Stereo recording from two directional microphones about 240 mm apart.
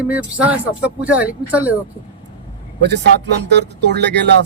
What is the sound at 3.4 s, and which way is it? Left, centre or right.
Speech, right.